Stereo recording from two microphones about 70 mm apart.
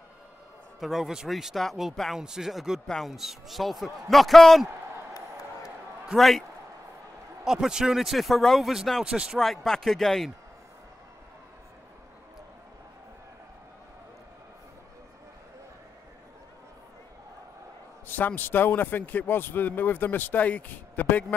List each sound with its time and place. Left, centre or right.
0.7 s speech: centre
6.1 s speech: centre
7.4 s speech: centre
9.0 s speech: centre
9.4 s speech: centre
18.0 s a man's voice: left